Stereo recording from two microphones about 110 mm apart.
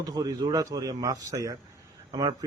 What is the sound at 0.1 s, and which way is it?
Speech, 35° right (ahead or behind).